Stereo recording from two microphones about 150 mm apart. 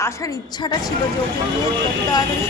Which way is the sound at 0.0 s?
20° left (ahead or behind).